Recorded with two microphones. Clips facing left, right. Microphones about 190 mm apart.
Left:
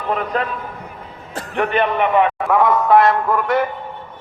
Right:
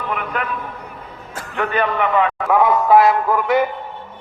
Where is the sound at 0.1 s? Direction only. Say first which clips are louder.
Left 5 dB; 35° left (ahead or behind).